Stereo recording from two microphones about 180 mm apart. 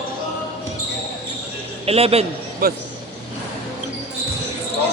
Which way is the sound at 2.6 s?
55° right (ahead or behind).